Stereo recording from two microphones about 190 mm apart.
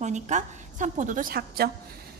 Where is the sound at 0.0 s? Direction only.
40° right (ahead or behind).